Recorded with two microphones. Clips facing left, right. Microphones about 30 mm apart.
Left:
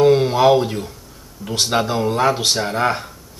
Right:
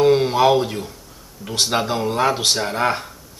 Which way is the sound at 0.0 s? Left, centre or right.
Centre.